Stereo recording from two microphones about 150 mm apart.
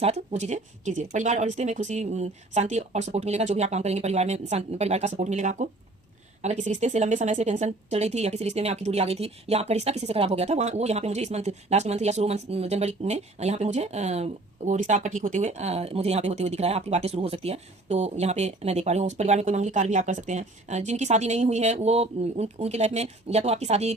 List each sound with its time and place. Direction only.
0.0 s speech: 45° right (ahead or behind)